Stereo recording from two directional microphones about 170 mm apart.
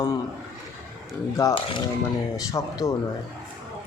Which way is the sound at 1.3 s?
20° left (ahead or behind).